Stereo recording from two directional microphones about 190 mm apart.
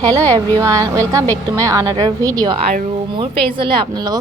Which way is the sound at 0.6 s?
15° right (ahead or behind).